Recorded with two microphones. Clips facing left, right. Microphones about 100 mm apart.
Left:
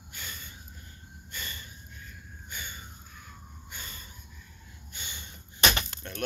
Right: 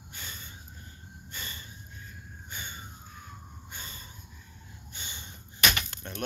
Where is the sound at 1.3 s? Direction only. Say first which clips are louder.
Left 1 dB; 25° right (ahead or behind).